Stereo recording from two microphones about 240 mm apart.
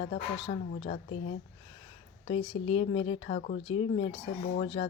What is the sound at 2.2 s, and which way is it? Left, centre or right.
Speech, left.